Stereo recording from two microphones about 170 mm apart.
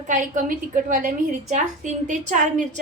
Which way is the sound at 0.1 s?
50° right (ahead or behind).